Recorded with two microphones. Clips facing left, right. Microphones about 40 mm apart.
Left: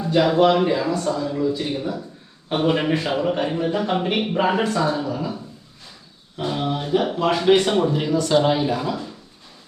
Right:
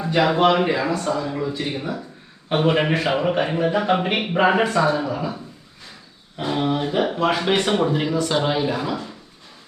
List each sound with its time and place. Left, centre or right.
0.0 s a man's voice: centre
3.2 s a man's voice: right